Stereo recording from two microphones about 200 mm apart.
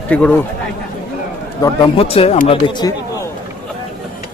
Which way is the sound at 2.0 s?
30° left (ahead or behind).